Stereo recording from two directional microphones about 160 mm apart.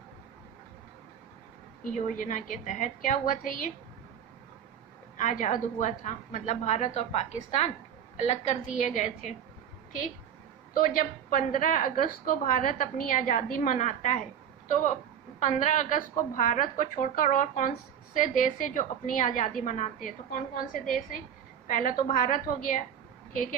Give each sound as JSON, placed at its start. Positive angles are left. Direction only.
{"t": 1.8, "sound": "a woman's voice", "side_deg": 50}
{"t": 5.1, "sound": "a woman's voice", "side_deg": 50}
{"t": 10.8, "sound": "a woman's voice", "side_deg": 60}
{"t": 15.4, "sound": "a woman's voice", "side_deg": 50}